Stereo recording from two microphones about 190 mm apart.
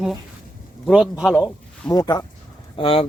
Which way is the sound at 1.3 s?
5° left (ahead or behind).